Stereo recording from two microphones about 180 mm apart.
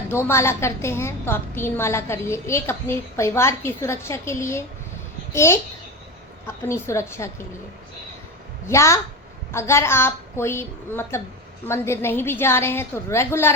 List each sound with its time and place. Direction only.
0.1 s a woman's voice: 15° left (ahead or behind)
6.7 s a woman's voice: 15° left (ahead or behind)
8.7 s a woman's voice: 15° left (ahead or behind)